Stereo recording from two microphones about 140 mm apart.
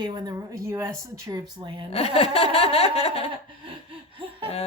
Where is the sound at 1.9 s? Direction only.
45° left (ahead or behind).